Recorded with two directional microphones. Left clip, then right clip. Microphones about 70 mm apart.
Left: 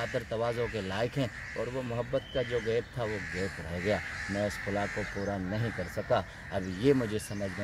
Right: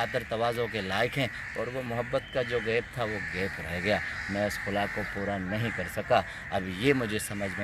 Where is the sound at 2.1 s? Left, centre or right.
Left.